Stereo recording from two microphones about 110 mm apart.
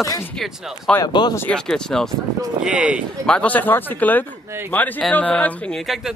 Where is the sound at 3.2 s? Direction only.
10° left (ahead or behind).